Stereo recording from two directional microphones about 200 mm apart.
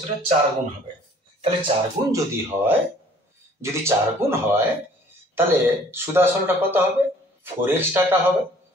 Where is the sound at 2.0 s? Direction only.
15° right (ahead or behind).